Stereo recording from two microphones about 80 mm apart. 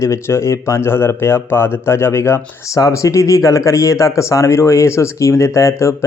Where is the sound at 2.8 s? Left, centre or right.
Left.